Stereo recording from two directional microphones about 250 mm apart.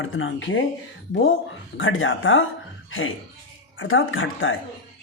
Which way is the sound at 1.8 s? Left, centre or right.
Left.